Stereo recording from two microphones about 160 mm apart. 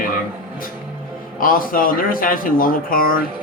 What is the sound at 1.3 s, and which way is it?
A man's voice, 60° left (ahead or behind).